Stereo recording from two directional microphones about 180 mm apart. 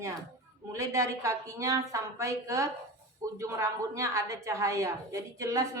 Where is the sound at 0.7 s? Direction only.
15° right (ahead or behind).